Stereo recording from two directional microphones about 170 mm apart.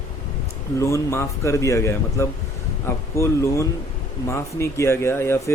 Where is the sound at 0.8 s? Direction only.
15° left (ahead or behind).